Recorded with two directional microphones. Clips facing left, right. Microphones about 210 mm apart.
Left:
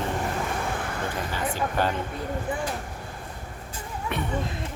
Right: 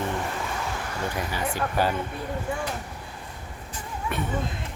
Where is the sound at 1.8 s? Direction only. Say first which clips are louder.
Right 1 dB; 10° right (ahead or behind).